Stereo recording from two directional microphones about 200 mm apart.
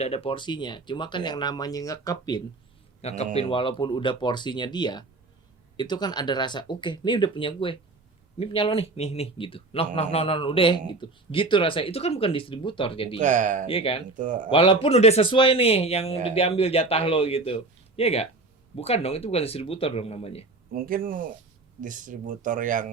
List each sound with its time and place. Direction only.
0.0 s speech: 30° left (ahead or behind)
3.0 s a man's voice: 30° left (ahead or behind)
13.1 s speech: 40° right (ahead or behind)
13.7 s speech: 30° left (ahead or behind)
14.2 s speech: 40° right (ahead or behind)
14.5 s speech: 25° left (ahead or behind)
20.7 s speech: 45° right (ahead or behind)